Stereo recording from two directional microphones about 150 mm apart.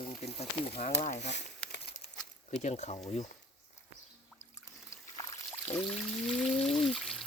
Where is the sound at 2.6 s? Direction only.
50° left (ahead or behind).